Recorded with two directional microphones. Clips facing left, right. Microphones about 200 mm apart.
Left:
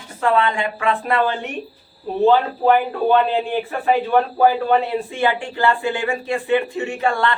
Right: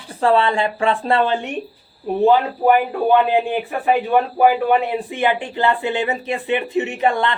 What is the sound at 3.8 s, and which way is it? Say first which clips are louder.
A man's voice: even; 15° right (ahead or behind).